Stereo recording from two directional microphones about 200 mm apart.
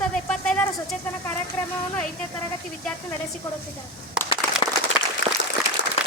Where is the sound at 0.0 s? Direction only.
5° left (ahead or behind).